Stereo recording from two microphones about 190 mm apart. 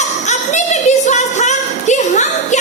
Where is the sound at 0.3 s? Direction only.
40° left (ahead or behind).